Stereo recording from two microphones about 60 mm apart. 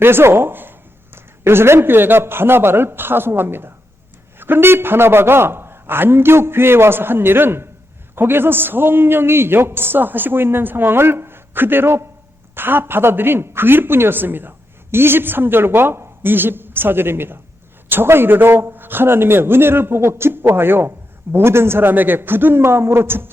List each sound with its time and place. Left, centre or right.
0.0 s speech: right